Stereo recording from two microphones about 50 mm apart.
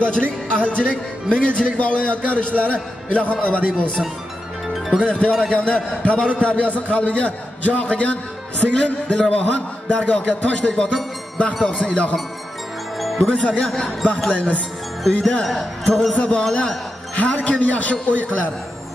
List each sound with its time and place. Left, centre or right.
0.0 s music: left
1.3 s a man's voice: left
13.2 s a man's voice: left
14.0 s music: left
15.1 s a man's voice: left